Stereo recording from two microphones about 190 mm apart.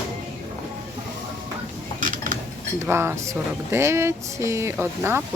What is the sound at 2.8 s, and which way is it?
Speech, 15° right (ahead or behind).